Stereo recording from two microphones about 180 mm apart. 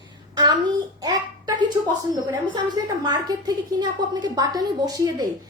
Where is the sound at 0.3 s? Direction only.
20° right (ahead or behind).